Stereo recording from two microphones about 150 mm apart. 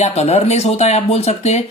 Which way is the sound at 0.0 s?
45° left (ahead or behind).